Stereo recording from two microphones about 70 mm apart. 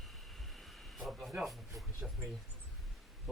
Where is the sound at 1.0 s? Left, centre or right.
Centre.